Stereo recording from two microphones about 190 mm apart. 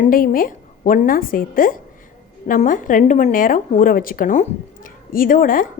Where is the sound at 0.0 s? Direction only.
45° left (ahead or behind).